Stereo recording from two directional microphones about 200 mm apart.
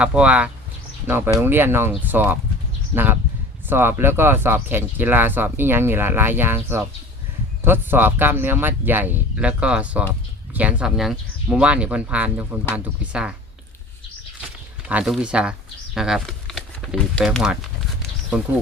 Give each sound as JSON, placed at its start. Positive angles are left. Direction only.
{"t": 0.0, "sound": "speech", "side_deg": -5}
{"t": 14.8, "sound": "speech", "side_deg": -5}